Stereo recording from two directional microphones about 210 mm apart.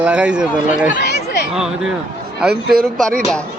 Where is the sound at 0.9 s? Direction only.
55° left (ahead or behind).